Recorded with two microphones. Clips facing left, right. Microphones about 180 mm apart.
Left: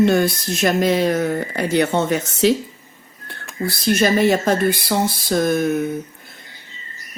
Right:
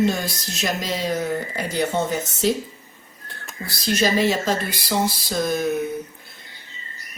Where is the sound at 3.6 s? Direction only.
55° left (ahead or behind).